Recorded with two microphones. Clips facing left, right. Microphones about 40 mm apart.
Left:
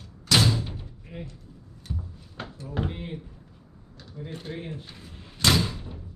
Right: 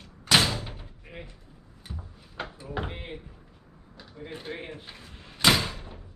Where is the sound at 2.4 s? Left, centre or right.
Centre.